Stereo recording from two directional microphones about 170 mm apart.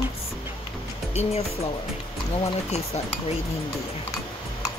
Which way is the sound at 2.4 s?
35° left (ahead or behind).